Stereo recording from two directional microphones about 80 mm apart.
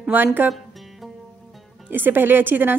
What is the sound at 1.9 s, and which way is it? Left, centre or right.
Speech, right.